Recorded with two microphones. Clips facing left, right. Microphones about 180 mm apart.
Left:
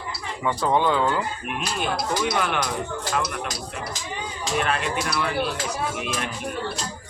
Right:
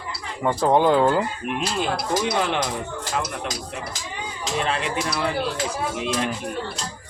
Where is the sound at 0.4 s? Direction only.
40° right (ahead or behind).